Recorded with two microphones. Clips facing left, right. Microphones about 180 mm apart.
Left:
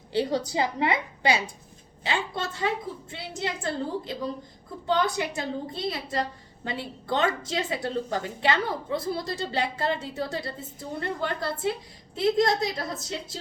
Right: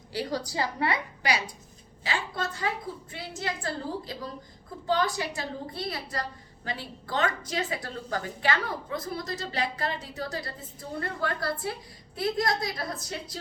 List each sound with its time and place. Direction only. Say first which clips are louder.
0.1 s a woman's voice: left 5 dB; 25° left (ahead or behind)